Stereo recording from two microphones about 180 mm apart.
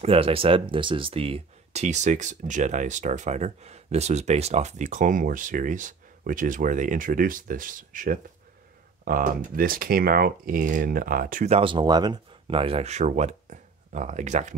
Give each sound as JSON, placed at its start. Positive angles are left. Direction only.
{"t": 0.0, "sound": "speech", "side_deg": -30}